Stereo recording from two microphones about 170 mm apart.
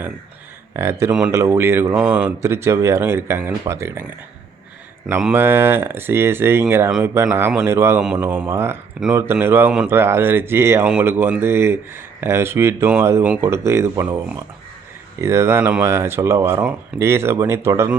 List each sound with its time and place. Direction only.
0.8 s speech: 15° right (ahead or behind)
5.0 s speech: 10° right (ahead or behind)